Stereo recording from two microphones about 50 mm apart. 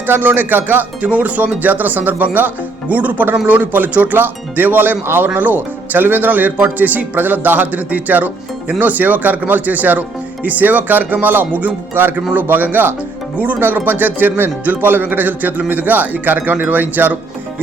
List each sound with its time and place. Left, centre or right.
0.0 s speech: right
13.6 s speech: right